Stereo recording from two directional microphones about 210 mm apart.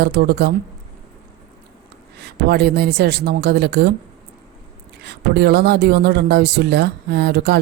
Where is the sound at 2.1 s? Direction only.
50° right (ahead or behind).